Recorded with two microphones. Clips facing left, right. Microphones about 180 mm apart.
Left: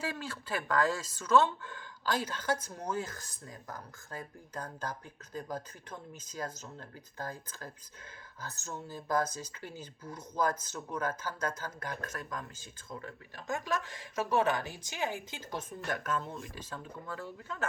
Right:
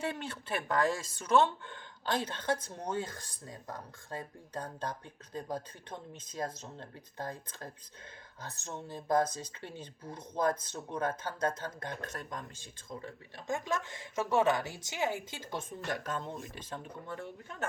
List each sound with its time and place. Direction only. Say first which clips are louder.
0.0 s speech: right 1 dB; 25° right (ahead or behind)